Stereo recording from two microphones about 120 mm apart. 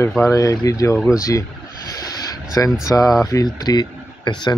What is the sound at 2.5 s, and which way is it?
Speech, 30° left (ahead or behind).